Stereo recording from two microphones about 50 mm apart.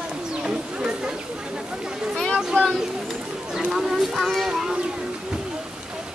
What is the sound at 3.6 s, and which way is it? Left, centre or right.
Speech, centre.